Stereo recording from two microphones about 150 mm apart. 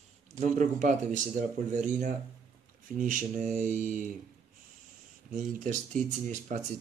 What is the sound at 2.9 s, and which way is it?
Speech, 60° right (ahead or behind).